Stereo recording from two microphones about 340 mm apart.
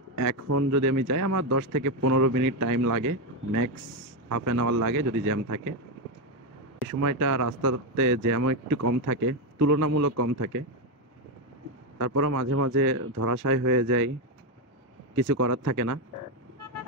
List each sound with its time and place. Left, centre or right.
0.2 s speech: right
2.0 s speech: right
3.7 s speech: right
4.3 s speech: right
6.9 s speech: right
12.0 s speech: right
15.3 s speech: right